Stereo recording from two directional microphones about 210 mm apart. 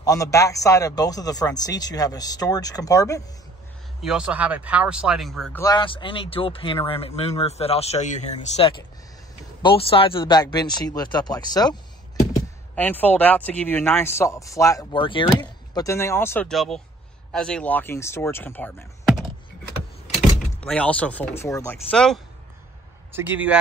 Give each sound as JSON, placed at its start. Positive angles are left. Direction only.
{"t": 0.0, "sound": "speech", "side_deg": 15}
{"t": 4.0, "sound": "speech", "side_deg": -5}
{"t": 5.6, "sound": "speech", "side_deg": 20}
{"t": 12.7, "sound": "speech", "side_deg": 10}
{"t": 21.9, "sound": "speech", "side_deg": 5}
{"t": 23.1, "sound": "a man's voice", "side_deg": -10}